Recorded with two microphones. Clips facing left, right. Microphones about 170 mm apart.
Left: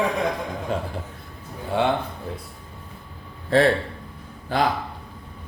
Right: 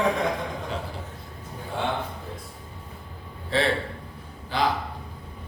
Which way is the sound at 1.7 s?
75° left (ahead or behind).